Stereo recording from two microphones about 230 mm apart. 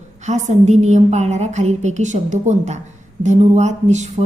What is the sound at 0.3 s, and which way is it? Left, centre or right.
A woman's voice, right.